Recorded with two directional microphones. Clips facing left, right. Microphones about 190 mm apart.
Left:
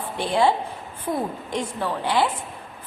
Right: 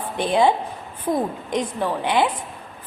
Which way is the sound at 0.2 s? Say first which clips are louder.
Right 2 dB; 20° right (ahead or behind).